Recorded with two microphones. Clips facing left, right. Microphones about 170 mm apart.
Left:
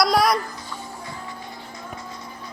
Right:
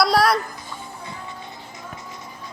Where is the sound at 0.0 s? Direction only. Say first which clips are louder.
Right 1 dB; centre (ahead or behind).